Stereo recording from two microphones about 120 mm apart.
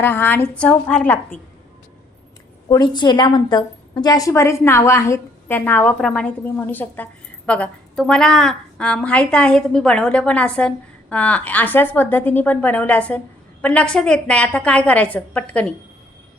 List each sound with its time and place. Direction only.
0.0 s a woman's voice: 15° left (ahead or behind)
2.6 s a woman's voice: 35° left (ahead or behind); by 15.7 s 10° left (ahead or behind)